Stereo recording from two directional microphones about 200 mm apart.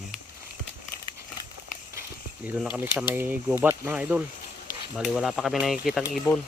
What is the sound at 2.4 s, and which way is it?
Speech, 5° right (ahead or behind).